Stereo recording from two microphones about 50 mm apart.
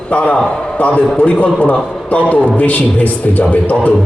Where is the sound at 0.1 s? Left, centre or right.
Left.